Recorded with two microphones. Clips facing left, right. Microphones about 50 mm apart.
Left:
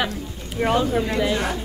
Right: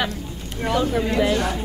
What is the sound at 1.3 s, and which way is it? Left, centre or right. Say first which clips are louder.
Speech: right 1 dB; centre.